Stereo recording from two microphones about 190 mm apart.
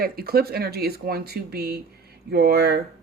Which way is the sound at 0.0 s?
55° right (ahead or behind).